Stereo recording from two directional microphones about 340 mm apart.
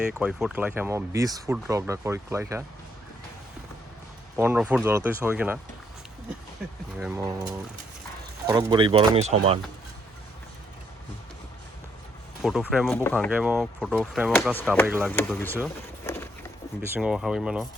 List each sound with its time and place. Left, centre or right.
0.1 s speech: centre
4.4 s speech: centre
7.0 s speech: centre
12.4 s speech: centre